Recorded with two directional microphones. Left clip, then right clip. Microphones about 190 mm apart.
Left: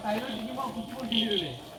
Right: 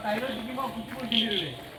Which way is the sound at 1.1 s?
55° right (ahead or behind).